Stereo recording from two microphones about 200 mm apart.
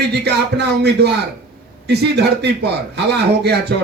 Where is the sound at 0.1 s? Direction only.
55° right (ahead or behind).